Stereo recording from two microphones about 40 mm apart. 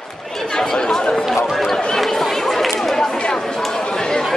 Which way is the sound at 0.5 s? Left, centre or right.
Centre.